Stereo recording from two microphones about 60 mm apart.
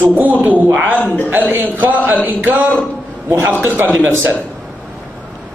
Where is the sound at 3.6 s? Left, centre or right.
Right.